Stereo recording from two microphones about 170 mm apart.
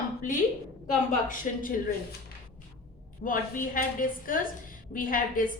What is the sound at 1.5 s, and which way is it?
Speech, 50° left (ahead or behind).